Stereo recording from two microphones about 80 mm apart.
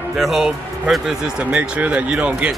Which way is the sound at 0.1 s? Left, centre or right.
Centre.